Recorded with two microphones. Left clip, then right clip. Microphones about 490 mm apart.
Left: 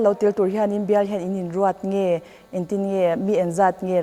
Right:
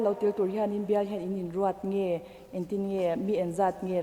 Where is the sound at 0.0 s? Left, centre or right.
Left.